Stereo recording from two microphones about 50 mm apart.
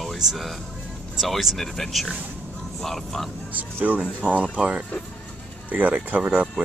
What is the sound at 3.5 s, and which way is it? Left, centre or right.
Speech, right.